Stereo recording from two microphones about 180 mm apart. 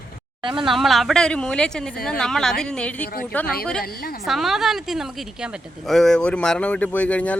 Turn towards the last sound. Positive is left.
turn(degrees=5)  # may be behind; listen again after turning